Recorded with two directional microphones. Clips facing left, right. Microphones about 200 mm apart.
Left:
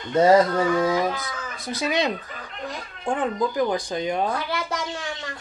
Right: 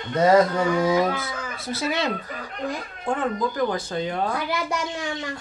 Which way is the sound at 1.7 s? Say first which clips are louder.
Left 1 dB; 15° left (ahead or behind).